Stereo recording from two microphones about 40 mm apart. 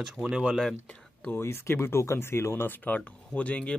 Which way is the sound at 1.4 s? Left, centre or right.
Left.